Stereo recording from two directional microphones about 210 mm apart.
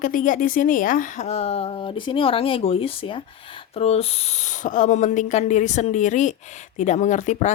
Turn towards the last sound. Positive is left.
turn(degrees=35)  # may be behind; listen again after turning